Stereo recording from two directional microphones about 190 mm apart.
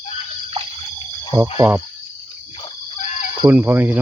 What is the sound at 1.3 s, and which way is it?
Speech, 10° right (ahead or behind).